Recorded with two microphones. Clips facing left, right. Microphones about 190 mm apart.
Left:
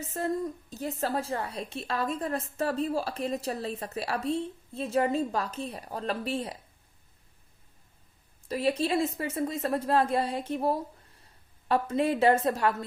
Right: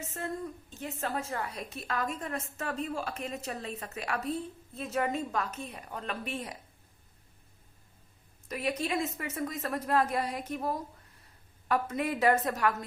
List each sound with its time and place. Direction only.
0.0 s a woman's voice: 35° left (ahead or behind)
8.4 s a woman's voice: 30° left (ahead or behind)